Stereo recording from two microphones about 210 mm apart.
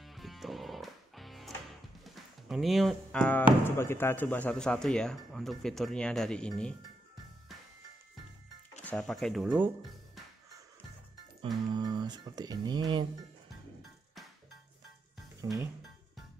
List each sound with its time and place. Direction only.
0.0 s music: centre (ahead or behind)
2.0 s speech: centre (ahead or behind)
8.8 s speech: centre (ahead or behind)
11.7 s speech: 20° right (ahead or behind)
15.4 s speech: 15° right (ahead or behind)